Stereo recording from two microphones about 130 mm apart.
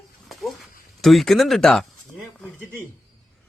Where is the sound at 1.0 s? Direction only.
Centre (ahead or behind).